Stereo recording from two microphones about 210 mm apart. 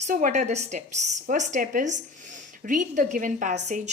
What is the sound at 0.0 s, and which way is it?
Speech, 35° right (ahead or behind).